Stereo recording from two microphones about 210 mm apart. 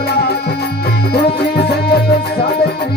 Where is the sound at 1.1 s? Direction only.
50° left (ahead or behind).